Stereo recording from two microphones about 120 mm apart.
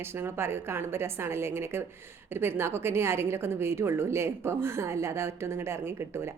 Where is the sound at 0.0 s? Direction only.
20° right (ahead or behind).